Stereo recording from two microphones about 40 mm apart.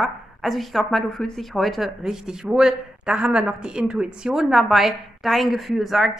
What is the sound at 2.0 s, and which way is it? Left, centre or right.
A woman's voice, centre.